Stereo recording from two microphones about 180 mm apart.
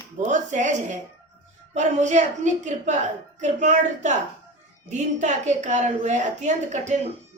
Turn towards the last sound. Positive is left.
turn(degrees=-40)  # may be behind; listen again after turning